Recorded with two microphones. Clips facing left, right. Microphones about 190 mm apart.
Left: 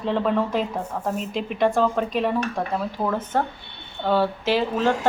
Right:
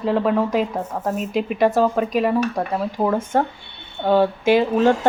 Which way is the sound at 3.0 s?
25° right (ahead or behind).